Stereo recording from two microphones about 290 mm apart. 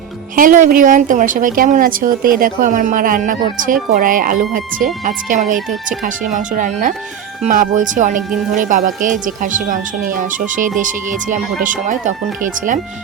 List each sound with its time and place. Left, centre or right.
0.3 s speech: right
5.5 s speech: centre
6.0 s speech: right